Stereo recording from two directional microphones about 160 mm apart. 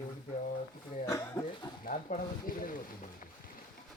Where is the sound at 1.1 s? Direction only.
20° left (ahead or behind).